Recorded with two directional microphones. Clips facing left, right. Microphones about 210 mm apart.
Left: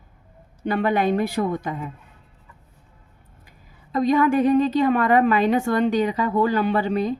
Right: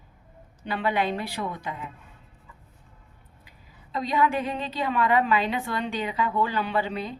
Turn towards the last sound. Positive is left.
turn(degrees=45)  # may be behind; listen again after turning